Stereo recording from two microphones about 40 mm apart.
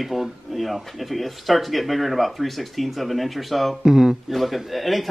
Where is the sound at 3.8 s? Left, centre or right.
Centre.